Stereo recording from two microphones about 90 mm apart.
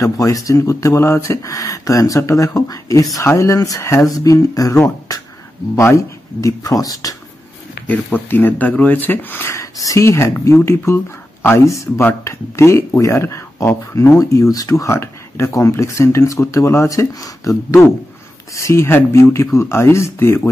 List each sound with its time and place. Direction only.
0.0 s speech: 40° left (ahead or behind)
7.8 s speech: 20° left (ahead or behind)
9.5 s speech: 40° left (ahead or behind)